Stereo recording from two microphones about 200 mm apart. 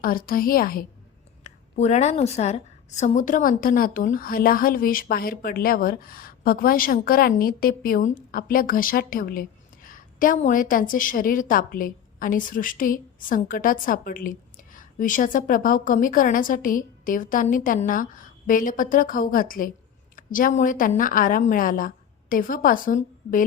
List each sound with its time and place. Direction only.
0.0 s a woman's voice: 45° left (ahead or behind)
1.5 s a woman's voice: 35° left (ahead or behind)